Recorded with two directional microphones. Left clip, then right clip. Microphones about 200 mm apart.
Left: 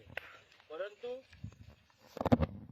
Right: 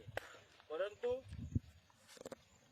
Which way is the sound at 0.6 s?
10° right (ahead or behind).